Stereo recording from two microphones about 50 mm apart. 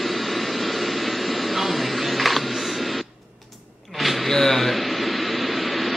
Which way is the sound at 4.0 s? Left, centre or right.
Centre.